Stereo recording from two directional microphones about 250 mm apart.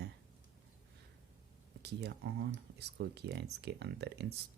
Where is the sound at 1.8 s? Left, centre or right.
Right.